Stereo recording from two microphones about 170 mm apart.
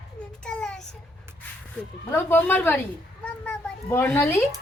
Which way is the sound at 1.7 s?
15° left (ahead or behind).